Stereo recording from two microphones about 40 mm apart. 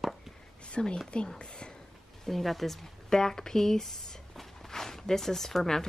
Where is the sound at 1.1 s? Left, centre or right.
Left.